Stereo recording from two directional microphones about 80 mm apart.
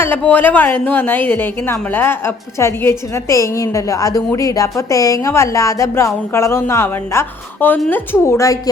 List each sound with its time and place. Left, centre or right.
0.0 s a woman's voice: left
8.2 s speech: left